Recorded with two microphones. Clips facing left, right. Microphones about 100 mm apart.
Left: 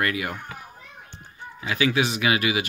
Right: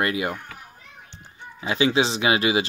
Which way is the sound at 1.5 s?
25° right (ahead or behind).